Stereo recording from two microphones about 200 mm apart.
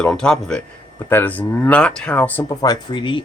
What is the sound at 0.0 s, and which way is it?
Speech, 5° left (ahead or behind).